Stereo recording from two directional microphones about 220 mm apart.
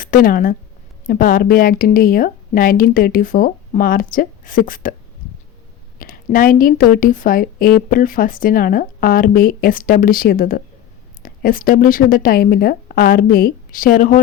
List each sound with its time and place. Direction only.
0.0 s speech: 40° left (ahead or behind)
6.0 s a woman's voice: 40° left (ahead or behind)